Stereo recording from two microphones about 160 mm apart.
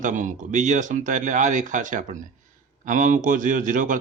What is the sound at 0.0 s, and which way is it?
Speech, 50° right (ahead or behind).